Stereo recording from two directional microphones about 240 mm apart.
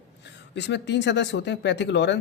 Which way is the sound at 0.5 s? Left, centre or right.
Left.